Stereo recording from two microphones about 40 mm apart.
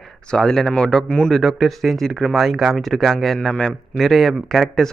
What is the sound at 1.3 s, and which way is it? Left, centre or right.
Speech, centre.